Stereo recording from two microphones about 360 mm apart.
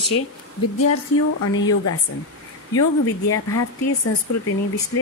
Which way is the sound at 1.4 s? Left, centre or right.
Left.